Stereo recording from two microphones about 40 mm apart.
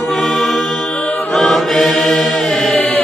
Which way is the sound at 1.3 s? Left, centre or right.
Centre.